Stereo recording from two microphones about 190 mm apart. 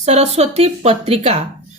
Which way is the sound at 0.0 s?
35° right (ahead or behind).